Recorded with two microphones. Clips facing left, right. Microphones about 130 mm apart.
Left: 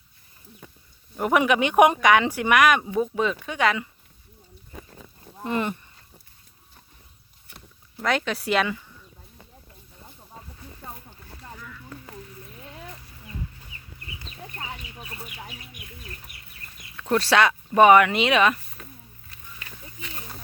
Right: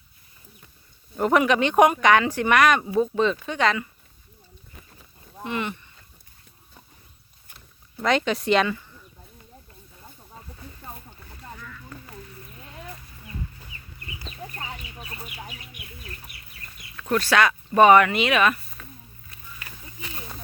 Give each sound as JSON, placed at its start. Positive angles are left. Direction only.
{"t": 1.1, "sound": "a woman's voice", "side_deg": 10}
{"t": 5.4, "sound": "speech", "side_deg": 40}
{"t": 8.0, "sound": "speech", "side_deg": 0}
{"t": 17.0, "sound": "speech", "side_deg": 30}
{"t": 17.8, "sound": "a woman's voice", "side_deg": 10}
{"t": 18.1, "sound": "speech", "side_deg": 25}